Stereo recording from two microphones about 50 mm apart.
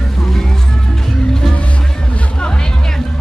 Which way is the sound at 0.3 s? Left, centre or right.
Centre.